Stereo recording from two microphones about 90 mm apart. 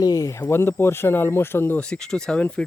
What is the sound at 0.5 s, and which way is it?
Speech, 25° left (ahead or behind).